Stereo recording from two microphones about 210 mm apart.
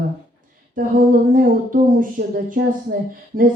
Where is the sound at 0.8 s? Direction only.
40° right (ahead or behind).